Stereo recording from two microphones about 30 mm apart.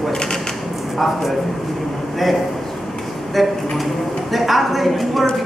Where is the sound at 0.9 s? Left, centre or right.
Centre.